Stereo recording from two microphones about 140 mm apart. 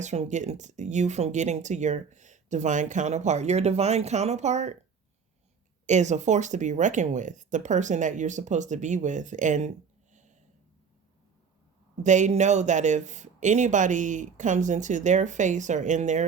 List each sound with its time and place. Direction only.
0.0 s speech: 55° right (ahead or behind)
5.8 s speech: 55° right (ahead or behind)
12.0 s speech: 60° right (ahead or behind)